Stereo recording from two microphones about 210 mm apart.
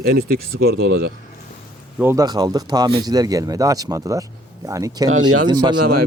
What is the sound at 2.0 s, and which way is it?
Speech, 15° right (ahead or behind).